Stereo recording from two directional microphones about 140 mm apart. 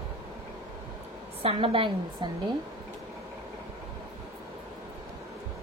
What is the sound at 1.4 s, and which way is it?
Speech, 40° right (ahead or behind).